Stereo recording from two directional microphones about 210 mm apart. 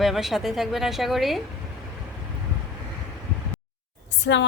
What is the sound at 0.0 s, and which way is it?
A woman's voice, centre (ahead or behind).